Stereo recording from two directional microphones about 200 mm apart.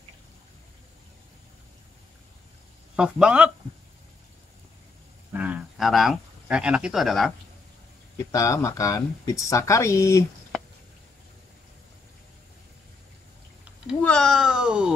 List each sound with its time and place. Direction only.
3.0 s speech: 5° right (ahead or behind)
5.3 s speech: 10° right (ahead or behind)
8.3 s speech: 15° left (ahead or behind)
13.8 s a sound: 5° left (ahead or behind)